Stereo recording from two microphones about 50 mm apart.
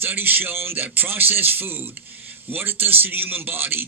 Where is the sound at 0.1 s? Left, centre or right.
Right.